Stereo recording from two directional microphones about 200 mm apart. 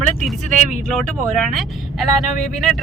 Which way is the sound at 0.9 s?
Centre (ahead or behind).